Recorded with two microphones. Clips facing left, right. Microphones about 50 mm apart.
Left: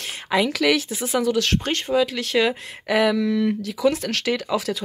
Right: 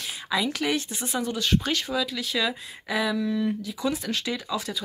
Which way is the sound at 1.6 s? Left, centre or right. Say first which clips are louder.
Left 6 dB; left.